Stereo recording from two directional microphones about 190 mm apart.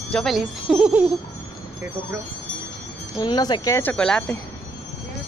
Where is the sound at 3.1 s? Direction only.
20° left (ahead or behind); by 4.3 s 5° left (ahead or behind).